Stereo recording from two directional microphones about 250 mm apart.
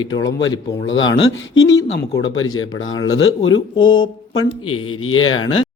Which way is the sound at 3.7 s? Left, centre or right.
Centre.